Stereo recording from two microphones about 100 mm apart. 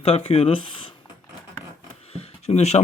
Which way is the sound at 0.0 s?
75° left (ahead or behind).